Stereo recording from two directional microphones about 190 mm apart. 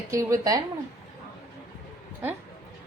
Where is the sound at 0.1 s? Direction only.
15° right (ahead or behind).